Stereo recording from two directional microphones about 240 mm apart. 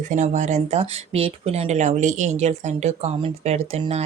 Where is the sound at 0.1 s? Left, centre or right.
Right.